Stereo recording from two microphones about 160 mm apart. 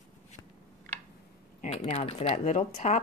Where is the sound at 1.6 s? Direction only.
40° left (ahead or behind).